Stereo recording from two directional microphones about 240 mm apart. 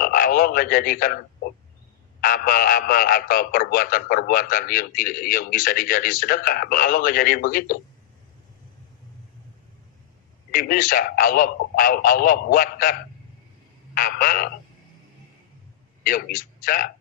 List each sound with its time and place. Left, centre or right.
0.0 s a man's voice: left
10.5 s speech: left
13.9 s speech: left
16.0 s a man's voice: left